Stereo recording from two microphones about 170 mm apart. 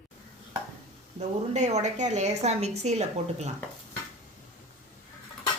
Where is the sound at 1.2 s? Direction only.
45° right (ahead or behind).